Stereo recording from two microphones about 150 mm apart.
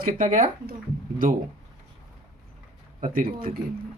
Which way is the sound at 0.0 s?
60° right (ahead or behind).